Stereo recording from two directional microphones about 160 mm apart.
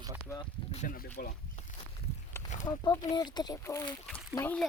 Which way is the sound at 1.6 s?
45° left (ahead or behind).